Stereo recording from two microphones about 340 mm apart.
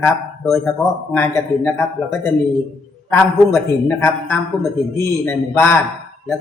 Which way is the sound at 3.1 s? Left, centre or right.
Centre.